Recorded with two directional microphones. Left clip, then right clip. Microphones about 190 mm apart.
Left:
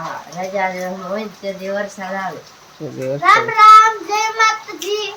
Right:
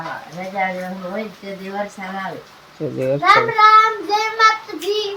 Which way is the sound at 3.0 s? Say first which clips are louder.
Right 3 dB; 15° right (ahead or behind).